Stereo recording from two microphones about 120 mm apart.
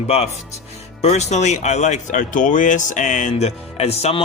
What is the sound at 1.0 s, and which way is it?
Speech, 70° left (ahead or behind).